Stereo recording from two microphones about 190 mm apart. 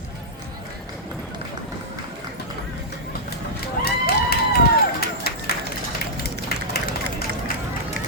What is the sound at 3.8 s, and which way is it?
Run, 55° left (ahead or behind).